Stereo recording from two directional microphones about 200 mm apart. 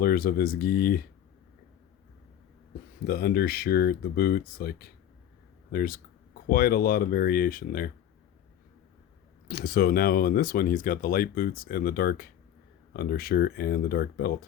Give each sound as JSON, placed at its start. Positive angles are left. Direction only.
{"t": 0.0, "sound": "speech", "side_deg": 50}
{"t": 3.1, "sound": "speech", "side_deg": 50}
{"t": 9.5, "sound": "speech", "side_deg": 50}